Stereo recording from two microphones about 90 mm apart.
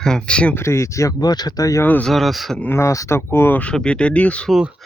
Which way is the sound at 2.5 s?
20° left (ahead or behind).